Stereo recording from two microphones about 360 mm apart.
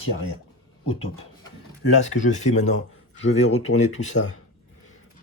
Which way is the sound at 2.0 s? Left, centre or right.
Centre.